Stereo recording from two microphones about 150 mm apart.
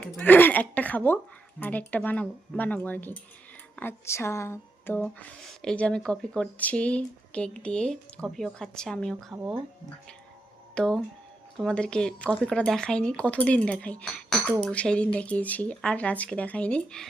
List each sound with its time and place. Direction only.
0.2 s speech: 10° left (ahead or behind)
5.4 s speech: 5° left (ahead or behind)
9.3 s speech: 10° right (ahead or behind)
10.8 s speech: 5° left (ahead or behind)